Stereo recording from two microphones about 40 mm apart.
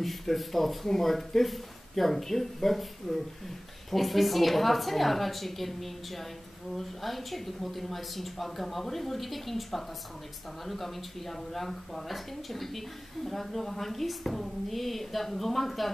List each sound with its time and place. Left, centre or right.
0.0 s speech: centre